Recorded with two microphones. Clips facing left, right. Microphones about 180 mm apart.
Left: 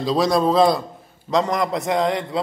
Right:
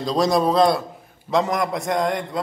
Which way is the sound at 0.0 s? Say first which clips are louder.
Left 1 dB; centre (ahead or behind).